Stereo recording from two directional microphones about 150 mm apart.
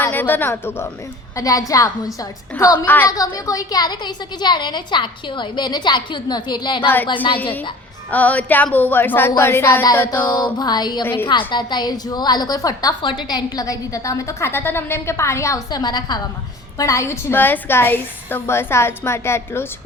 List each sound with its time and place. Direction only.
0.0 s a woman's voice: 15° left (ahead or behind)
2.6 s a woman's voice: 15° left (ahead or behind)
3.1 s a woman's voice: 25° left (ahead or behind)
6.8 s a woman's voice: 10° left (ahead or behind)
10.3 s a woman's voice: 30° left (ahead or behind)
11.0 s a woman's voice: 15° left (ahead or behind)
11.3 s a woman's voice: 30° left (ahead or behind)